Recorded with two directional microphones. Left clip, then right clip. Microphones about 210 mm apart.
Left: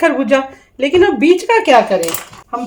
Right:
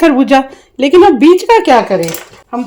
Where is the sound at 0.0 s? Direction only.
35° right (ahead or behind).